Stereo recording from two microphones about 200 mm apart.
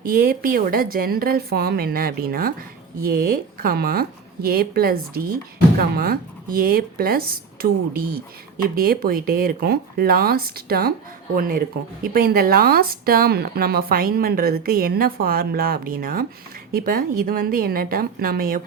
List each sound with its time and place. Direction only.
0.0 s speech: 45° right (ahead or behind)